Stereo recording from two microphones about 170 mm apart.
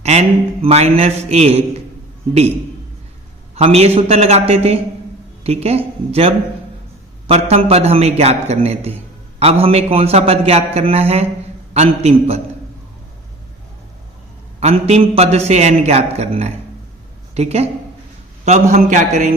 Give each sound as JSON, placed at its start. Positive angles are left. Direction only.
{"t": 0.0, "sound": "a man's voice", "side_deg": -40}
{"t": 3.5, "sound": "a man's voice", "side_deg": -35}
{"t": 14.6, "sound": "a man's voice", "side_deg": -35}